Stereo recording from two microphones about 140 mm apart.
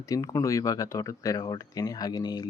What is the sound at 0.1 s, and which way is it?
Speech, 25° left (ahead or behind).